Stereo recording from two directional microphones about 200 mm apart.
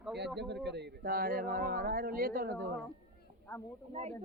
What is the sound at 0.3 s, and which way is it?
Speech, 55° right (ahead or behind).